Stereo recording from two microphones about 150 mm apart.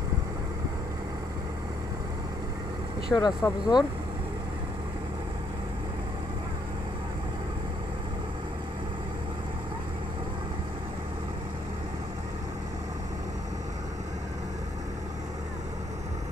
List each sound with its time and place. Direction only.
3.1 s speech: 25° left (ahead or behind)